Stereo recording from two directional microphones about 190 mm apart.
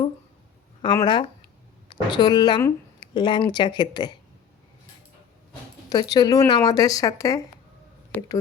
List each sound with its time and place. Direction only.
0.8 s speech: 25° left (ahead or behind)
5.9 s speech: 20° left (ahead or behind)